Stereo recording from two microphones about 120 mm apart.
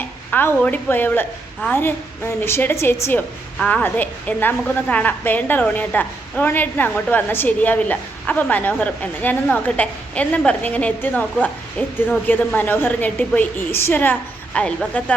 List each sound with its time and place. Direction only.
0.3 s a woman's voice: 15° left (ahead or behind)